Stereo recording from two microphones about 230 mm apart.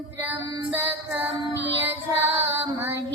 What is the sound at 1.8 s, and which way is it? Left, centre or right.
Child singing, centre.